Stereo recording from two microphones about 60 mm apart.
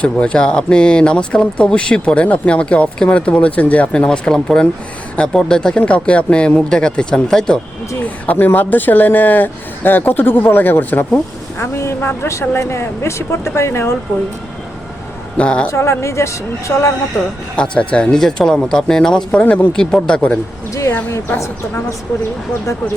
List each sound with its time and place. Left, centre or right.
0.0 s speech: centre
4.4 s speech: centre
8.0 s speech: left
11.6 s speech: left
11.9 s speech: left
15.4 s speech: centre
15.6 s a woman's voice: left
17.6 s speech: centre
19.4 s speech: left
19.7 s speech: centre
21.3 s a woman's voice: left